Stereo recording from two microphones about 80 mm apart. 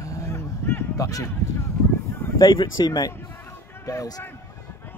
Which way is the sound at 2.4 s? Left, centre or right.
Left.